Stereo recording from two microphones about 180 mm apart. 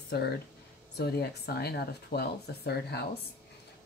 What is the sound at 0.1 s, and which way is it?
Speech, 65° left (ahead or behind).